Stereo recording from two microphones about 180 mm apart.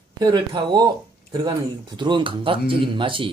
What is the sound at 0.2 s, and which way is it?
Speech, 20° right (ahead or behind).